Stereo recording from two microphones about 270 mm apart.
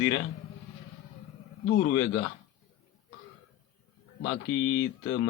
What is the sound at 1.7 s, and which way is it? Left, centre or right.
Speech, left.